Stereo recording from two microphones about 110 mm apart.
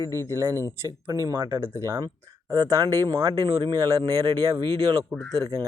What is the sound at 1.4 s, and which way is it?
Speech, 40° right (ahead or behind).